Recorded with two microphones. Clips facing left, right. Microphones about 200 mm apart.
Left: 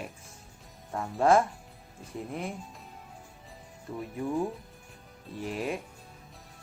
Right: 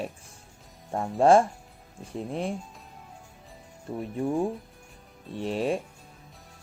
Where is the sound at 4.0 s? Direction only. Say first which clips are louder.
Right 4 dB; 30° right (ahead or behind).